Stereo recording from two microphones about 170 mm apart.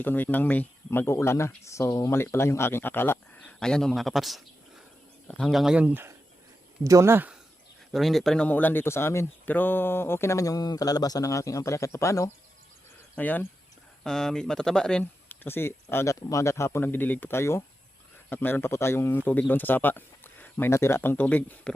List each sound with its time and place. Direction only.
0.0 s speech: 10° left (ahead or behind); by 7.3 s 10° right (ahead or behind)
7.9 s speech: centre (ahead or behind)